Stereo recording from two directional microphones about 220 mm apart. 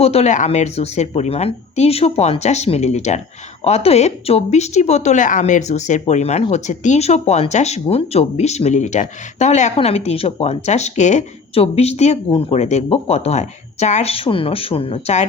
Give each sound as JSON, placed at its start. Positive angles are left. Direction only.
{"t": 0.0, "sound": "speech", "side_deg": 30}